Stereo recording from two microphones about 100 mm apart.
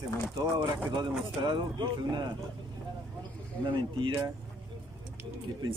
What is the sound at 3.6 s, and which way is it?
Speech, 55° right (ahead or behind).